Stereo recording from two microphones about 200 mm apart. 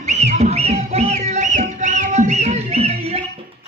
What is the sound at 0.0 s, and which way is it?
Music, 35° right (ahead or behind).